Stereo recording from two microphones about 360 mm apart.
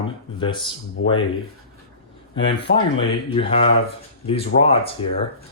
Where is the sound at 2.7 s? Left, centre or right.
Centre.